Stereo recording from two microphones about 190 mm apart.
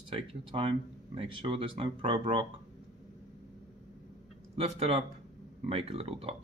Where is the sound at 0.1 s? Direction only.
25° right (ahead or behind).